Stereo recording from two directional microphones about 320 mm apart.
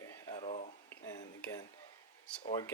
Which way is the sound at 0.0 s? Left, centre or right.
Centre.